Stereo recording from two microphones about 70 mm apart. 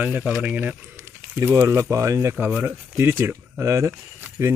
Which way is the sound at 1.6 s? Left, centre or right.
Right.